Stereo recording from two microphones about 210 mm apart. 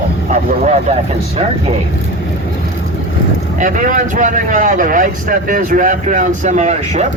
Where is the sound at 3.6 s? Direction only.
40° right (ahead or behind).